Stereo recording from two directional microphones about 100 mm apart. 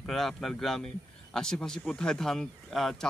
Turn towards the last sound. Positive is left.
turn(degrees=5)  # may be behind; listen again after turning